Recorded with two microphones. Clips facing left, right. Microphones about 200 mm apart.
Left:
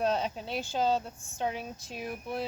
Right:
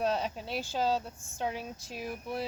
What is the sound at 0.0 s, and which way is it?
Speech, centre (ahead or behind).